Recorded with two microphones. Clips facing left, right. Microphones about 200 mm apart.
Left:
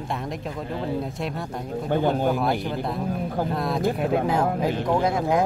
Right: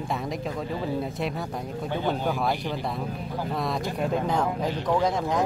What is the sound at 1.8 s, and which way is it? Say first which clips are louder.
Speech: left 5 dB; 50° left (ahead or behind).